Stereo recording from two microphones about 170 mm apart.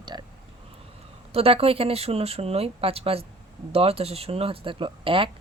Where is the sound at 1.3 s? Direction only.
35° right (ahead or behind).